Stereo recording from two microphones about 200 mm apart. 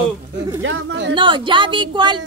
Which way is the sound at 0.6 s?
65° right (ahead or behind).